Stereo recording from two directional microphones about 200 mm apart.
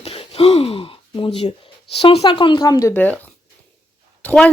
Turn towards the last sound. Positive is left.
turn(degrees=10)  # may be behind; listen again after turning